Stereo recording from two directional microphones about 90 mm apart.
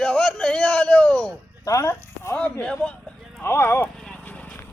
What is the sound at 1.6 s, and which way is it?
Speech, 40° left (ahead or behind).